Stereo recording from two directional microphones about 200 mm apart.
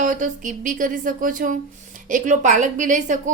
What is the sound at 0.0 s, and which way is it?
Speech, 40° right (ahead or behind).